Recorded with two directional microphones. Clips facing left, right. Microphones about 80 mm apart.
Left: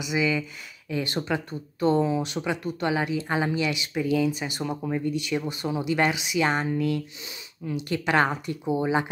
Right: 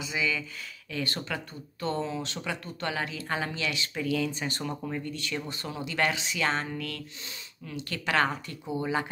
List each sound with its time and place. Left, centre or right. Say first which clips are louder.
0.0 s speech: left 6 dB; centre